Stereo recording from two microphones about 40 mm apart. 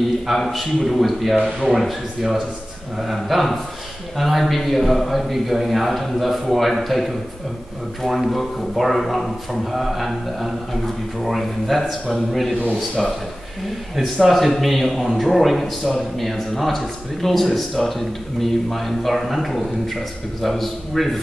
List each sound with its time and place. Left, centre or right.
0.3 s speech: centre